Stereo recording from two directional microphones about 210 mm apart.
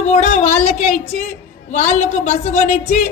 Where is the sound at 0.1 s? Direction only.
35° left (ahead or behind).